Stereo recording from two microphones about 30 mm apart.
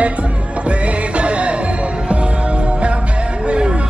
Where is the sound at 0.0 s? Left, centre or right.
Right.